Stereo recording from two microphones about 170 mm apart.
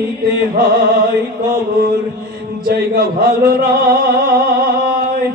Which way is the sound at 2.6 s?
65° right (ahead or behind).